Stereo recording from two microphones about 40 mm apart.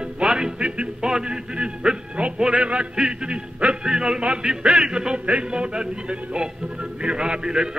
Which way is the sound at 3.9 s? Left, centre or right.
Centre.